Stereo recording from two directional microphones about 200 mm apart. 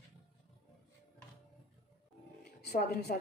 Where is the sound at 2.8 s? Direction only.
55° left (ahead or behind).